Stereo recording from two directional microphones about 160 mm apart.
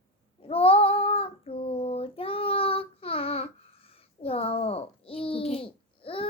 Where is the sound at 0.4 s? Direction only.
35° left (ahead or behind).